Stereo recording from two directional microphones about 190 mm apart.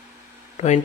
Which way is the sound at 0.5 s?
35° left (ahead or behind).